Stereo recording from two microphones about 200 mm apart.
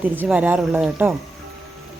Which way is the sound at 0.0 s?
5° right (ahead or behind).